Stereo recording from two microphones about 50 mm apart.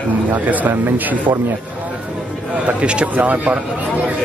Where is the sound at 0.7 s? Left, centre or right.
Right.